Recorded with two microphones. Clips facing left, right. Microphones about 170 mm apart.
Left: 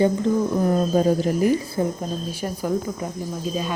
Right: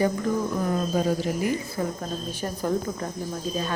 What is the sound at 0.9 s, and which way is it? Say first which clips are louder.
Speech: left 5 dB; 45° left (ahead or behind).